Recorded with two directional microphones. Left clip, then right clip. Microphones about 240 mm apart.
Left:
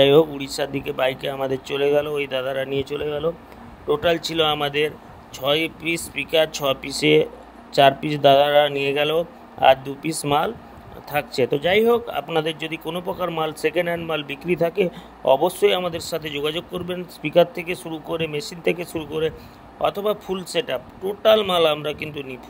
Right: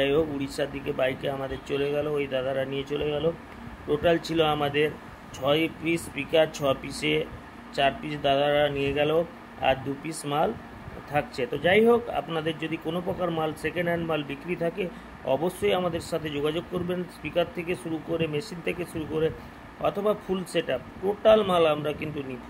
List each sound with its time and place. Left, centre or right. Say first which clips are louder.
0.0 s speech: left 9 dB; left